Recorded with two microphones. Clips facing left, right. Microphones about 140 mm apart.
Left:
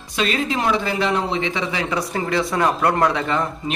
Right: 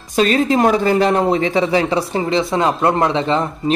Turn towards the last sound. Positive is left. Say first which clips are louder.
# right 3 dB
turn(degrees=-25)  # may be behind; listen again after turning